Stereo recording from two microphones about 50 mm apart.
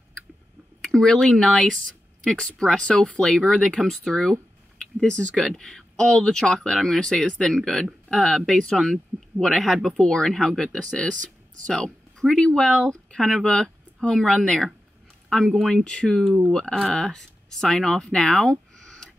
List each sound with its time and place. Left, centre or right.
0.8 s speech: centre
15.7 s speech: centre